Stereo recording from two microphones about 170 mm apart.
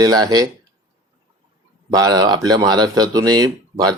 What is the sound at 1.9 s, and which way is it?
Speech, 20° right (ahead or behind).